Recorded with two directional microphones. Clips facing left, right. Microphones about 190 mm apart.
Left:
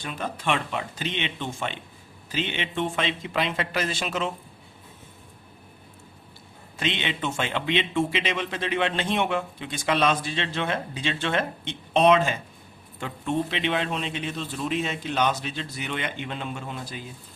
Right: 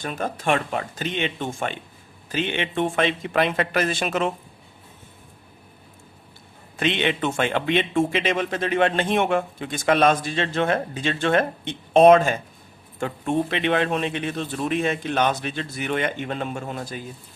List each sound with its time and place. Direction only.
0.0 s speech: 45° right (ahead or behind)
6.7 s speech: 55° right (ahead or behind)